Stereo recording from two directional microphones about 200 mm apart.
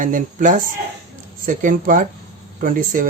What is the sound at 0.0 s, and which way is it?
Speech, 40° right (ahead or behind).